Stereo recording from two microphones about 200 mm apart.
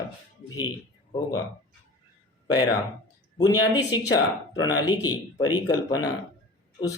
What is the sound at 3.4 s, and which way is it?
Speech, 20° left (ahead or behind).